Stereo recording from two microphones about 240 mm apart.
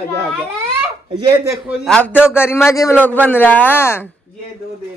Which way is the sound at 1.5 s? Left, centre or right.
Centre.